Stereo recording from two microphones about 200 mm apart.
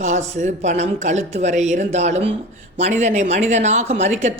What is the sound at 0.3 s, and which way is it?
Speech, 35° right (ahead or behind).